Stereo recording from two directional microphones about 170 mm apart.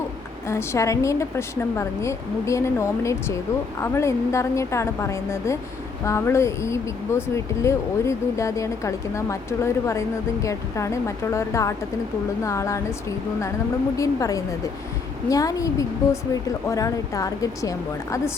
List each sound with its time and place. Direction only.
0.4 s speech: 15° left (ahead or behind)
13.9 s speech: 20° left (ahead or behind)